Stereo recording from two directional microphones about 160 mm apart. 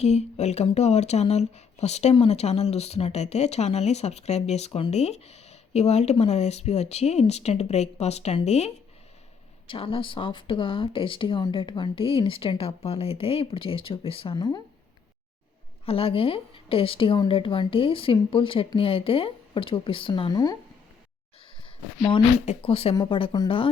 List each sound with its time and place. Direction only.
0.0 s speech: 45° left (ahead or behind); by 14.6 s 25° left (ahead or behind)
15.9 s speech: 35° left (ahead or behind)
22.4 s speech: 40° left (ahead or behind)